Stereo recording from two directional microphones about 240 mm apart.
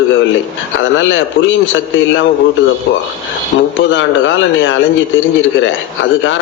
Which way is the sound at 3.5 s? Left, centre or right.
Left.